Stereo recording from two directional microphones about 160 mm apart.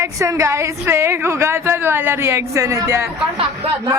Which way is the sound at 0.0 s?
20° right (ahead or behind).